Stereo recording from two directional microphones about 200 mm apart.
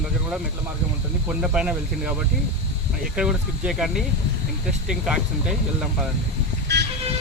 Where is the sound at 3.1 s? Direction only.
5° right (ahead or behind).